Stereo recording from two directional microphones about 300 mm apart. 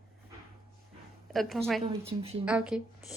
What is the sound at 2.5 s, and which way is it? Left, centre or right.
Speech, centre.